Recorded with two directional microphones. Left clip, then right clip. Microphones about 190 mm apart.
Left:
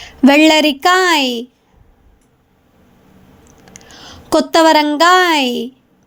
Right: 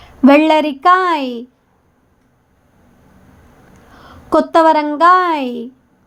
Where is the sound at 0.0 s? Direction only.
15° left (ahead or behind).